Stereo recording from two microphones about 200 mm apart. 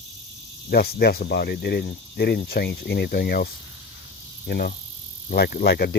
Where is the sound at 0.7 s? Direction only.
50° left (ahead or behind).